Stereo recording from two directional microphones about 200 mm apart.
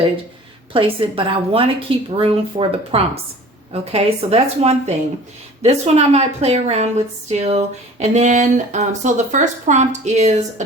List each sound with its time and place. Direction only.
0.7 s a woman's voice: 25° right (ahead or behind)